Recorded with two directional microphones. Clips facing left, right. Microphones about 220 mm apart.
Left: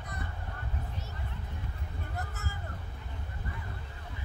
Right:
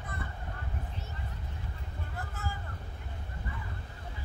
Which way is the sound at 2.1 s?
45° left (ahead or behind).